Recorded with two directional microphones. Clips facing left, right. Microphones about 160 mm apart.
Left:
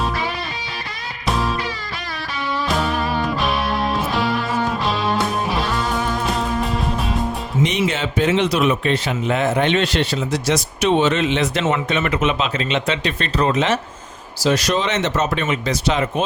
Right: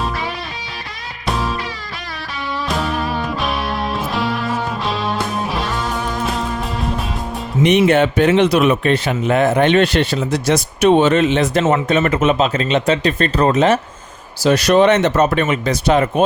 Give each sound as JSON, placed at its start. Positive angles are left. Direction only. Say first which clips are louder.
{"t": 1.3, "sound": "music", "louder": "even", "side_deg": 0}
{"t": 2.6, "sound": "music", "louder": "right 1 dB", "side_deg": 0}
{"t": 7.6, "sound": "speech", "louder": "right 9 dB", "side_deg": -60}
{"t": 14.4, "sound": "speech", "louder": "right 7 dB", "side_deg": -60}